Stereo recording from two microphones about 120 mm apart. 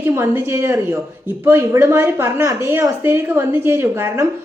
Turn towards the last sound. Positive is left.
turn(degrees=-20)  # may be behind; listen again after turning